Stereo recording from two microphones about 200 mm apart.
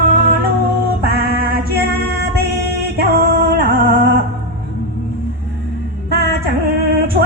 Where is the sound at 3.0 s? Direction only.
50° right (ahead or behind).